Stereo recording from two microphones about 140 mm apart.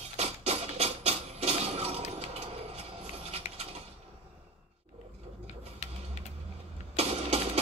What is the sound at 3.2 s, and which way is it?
Patter, 50° right (ahead or behind).